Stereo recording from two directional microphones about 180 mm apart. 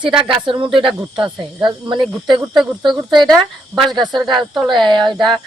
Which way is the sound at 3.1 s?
25° right (ahead or behind).